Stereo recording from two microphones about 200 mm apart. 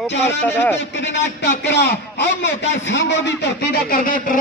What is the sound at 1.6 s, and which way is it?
A man's voice, 55° left (ahead or behind).